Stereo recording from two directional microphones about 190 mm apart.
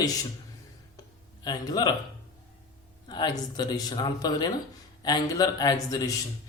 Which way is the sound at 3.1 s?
20° left (ahead or behind).